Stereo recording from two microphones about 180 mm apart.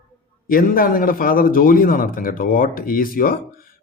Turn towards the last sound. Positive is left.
turn(degrees=55)  # may be behind; listen again after turning